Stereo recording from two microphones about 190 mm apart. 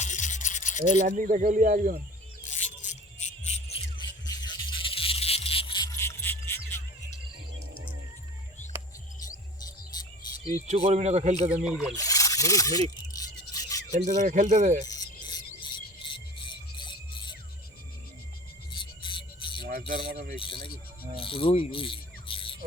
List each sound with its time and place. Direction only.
0.0 s a sound: 40° left (ahead or behind)
1.0 s speech: 45° right (ahead or behind)
2.5 s music: 40° left (ahead or behind)
4.0 s a sound: 20° left (ahead or behind)
9.6 s cricket: 20° left (ahead or behind)
10.7 s speech: 35° right (ahead or behind)
11.6 s speech: 5° right (ahead or behind)
11.9 s speech: 20° left (ahead or behind)
13.2 s a sound: 20° left (ahead or behind)
13.9 s speech: 40° right (ahead or behind)
14.8 s music: 20° left (ahead or behind)
18.7 s music: 25° left (ahead or behind)
20.1 s speech: 50° right (ahead or behind)
21.2 s speech: 30° left (ahead or behind)